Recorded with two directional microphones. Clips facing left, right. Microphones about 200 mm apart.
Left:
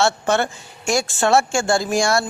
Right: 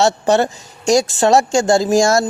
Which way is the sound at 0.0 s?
35° right (ahead or behind).